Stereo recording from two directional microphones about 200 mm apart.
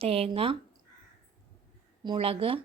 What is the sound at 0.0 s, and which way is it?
Speech, 30° right (ahead or behind).